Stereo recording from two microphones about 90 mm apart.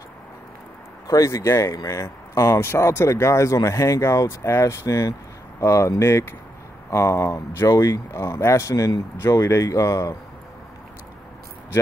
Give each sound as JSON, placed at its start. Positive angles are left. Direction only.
{"t": 1.0, "sound": "speech", "side_deg": 40}